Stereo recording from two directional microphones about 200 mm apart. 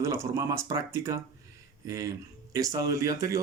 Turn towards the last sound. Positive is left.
turn(degrees=-15)  # may be behind; listen again after turning